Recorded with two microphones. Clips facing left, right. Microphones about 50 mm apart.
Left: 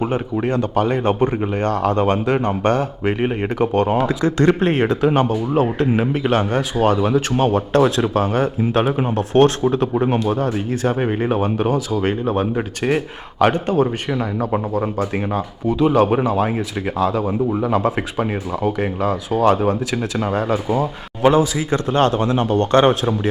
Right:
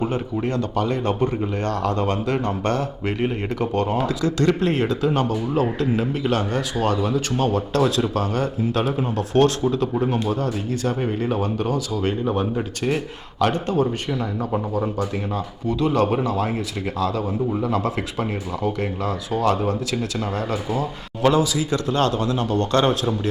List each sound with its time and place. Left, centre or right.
0.8 s speech: left
6.7 s speech: centre
7.0 s speech: left
15.6 s speech: centre
19.5 s speech: left
21.2 s speech: left